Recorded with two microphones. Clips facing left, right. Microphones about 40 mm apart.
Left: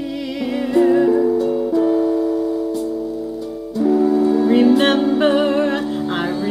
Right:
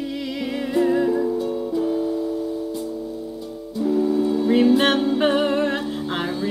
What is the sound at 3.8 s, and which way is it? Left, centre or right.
Music, left.